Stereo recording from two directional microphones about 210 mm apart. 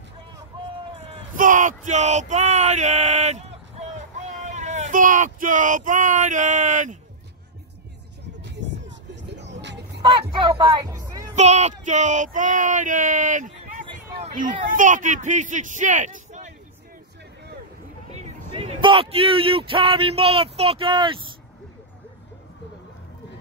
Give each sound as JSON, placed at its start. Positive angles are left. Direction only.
{"t": 1.1, "sound": "a sound", "side_deg": -40}
{"t": 4.5, "sound": "speech", "side_deg": -35}
{"t": 8.4, "sound": "music", "side_deg": -55}
{"t": 10.4, "sound": "speech", "side_deg": -25}
{"t": 11.3, "sound": "speech", "side_deg": -35}
{"t": 14.2, "sound": "a sound", "side_deg": -40}
{"t": 14.8, "sound": "speech", "side_deg": -35}
{"t": 18.1, "sound": "speech", "side_deg": -30}